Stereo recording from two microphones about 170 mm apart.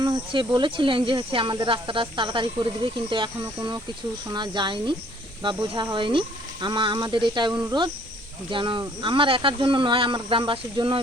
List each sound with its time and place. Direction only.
0.0 s speech: 25° right (ahead or behind)